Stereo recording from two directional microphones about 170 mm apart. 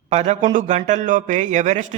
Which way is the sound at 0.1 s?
45° right (ahead or behind).